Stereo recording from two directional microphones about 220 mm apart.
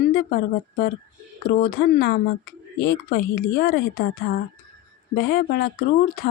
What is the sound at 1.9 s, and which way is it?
Speech, 45° left (ahead or behind).